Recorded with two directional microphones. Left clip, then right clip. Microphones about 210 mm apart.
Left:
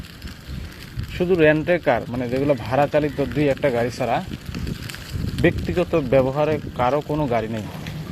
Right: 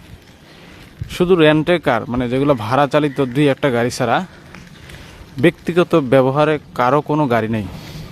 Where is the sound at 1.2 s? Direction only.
40° right (ahead or behind).